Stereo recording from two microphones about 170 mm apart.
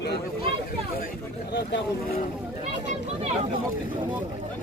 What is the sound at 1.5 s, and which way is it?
Speech, 75° left (ahead or behind).